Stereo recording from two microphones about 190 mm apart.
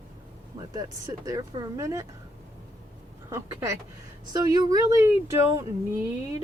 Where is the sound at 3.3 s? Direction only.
15° right (ahead or behind).